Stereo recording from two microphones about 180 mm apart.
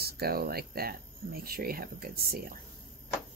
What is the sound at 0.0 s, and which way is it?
Speech, 60° right (ahead or behind).